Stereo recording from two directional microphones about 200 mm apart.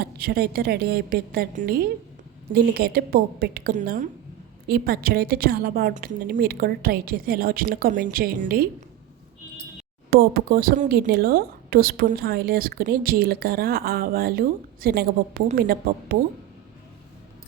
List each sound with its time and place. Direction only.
0.0 s speech: 50° right (ahead or behind)
10.1 s speech: 50° right (ahead or behind)